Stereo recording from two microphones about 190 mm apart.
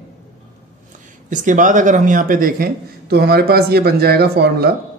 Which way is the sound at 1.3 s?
40° right (ahead or behind).